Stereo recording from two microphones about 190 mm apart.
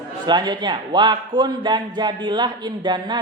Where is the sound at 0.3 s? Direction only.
25° right (ahead or behind).